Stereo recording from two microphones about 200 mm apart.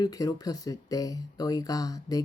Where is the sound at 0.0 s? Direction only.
20° left (ahead or behind).